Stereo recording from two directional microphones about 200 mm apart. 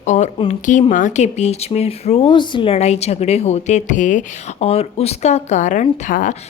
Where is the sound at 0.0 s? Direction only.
35° left (ahead or behind).